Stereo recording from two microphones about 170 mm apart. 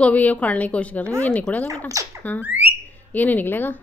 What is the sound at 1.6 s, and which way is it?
Speech, 20° right (ahead or behind).